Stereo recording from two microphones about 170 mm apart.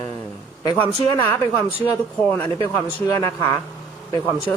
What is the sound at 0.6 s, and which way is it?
Speech, 25° left (ahead or behind).